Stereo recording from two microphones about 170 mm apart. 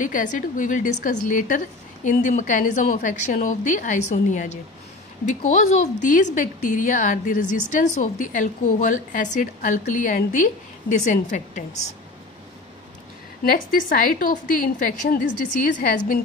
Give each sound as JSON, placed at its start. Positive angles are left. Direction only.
{"t": 0.0, "sound": "a woman's voice", "side_deg": 50}
{"t": 13.4, "sound": "a woman's voice", "side_deg": 60}